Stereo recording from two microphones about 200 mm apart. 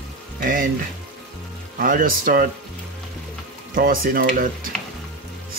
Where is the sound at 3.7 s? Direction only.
45° right (ahead or behind).